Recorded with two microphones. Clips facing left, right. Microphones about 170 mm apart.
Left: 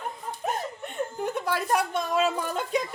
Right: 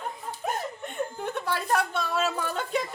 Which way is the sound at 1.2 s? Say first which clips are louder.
Left 5 dB; 10° left (ahead or behind).